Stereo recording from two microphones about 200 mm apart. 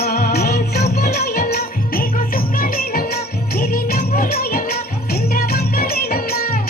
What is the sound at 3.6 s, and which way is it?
Music, 50° left (ahead or behind).